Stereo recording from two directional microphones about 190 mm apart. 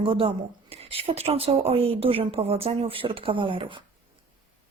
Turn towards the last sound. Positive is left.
turn(degrees=-25)  # may be behind; listen again after turning